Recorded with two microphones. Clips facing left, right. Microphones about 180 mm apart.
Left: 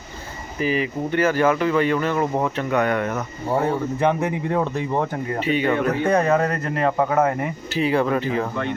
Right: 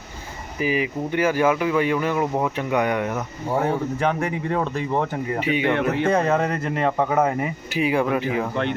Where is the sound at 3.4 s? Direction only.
15° left (ahead or behind).